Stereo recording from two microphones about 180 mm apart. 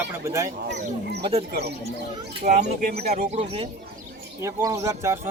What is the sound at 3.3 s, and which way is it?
Speech, 35° right (ahead or behind).